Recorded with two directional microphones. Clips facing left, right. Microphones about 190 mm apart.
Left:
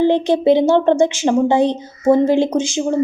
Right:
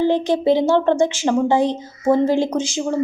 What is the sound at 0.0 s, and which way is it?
A woman's voice, 20° left (ahead or behind).